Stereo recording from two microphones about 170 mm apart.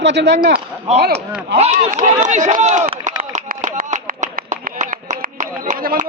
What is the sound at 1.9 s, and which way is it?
Speech, 45° right (ahead or behind).